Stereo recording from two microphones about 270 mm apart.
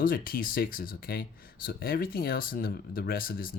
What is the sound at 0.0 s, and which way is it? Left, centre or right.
Speech, left.